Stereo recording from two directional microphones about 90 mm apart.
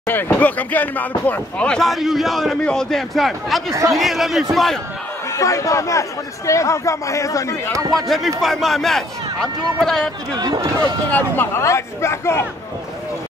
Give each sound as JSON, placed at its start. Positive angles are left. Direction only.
{"t": 0.0, "sound": "speech", "side_deg": 25}
{"t": 1.8, "sound": "speech", "side_deg": 0}
{"t": 5.3, "sound": "speech", "side_deg": 35}
{"t": 7.7, "sound": "speech", "side_deg": 0}
{"t": 10.3, "sound": "speech", "side_deg": -50}
{"t": 11.1, "sound": "speech", "side_deg": 20}
{"t": 11.6, "sound": "speech", "side_deg": 30}